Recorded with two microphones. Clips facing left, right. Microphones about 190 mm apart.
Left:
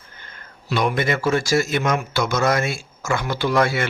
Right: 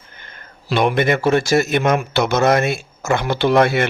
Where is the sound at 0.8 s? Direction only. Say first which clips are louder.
Right 5 dB; 60° right (ahead or behind).